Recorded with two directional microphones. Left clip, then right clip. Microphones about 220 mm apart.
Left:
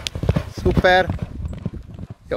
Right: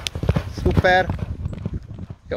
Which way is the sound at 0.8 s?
20° left (ahead or behind).